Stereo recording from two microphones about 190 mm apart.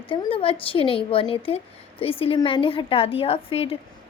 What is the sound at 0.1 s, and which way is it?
A woman's voice, 30° left (ahead or behind).